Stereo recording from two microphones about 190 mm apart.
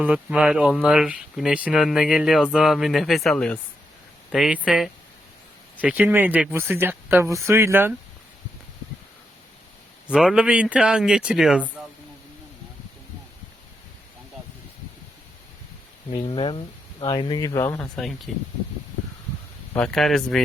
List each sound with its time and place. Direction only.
0.0 s speech: 5° right (ahead or behind)
10.1 s speech: 5° right (ahead or behind)
16.1 s speech: 25° left (ahead or behind)
18.3 s speech: 5° left (ahead or behind)
19.7 s speech: 5° left (ahead or behind)